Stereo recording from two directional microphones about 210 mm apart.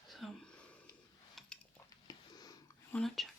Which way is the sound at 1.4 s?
Centre (ahead or behind).